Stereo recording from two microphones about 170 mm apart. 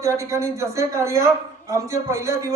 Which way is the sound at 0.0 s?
20° right (ahead or behind).